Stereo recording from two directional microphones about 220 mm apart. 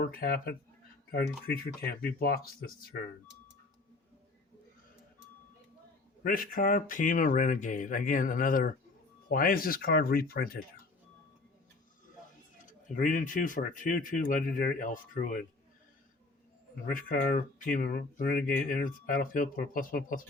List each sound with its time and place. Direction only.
0.0 s speech: 40° left (ahead or behind)
6.2 s speech: 40° left (ahead or behind)
12.6 s speech: 35° left (ahead or behind)
16.9 s speech: 40° left (ahead or behind)